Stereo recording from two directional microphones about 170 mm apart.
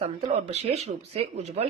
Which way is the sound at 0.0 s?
40° right (ahead or behind).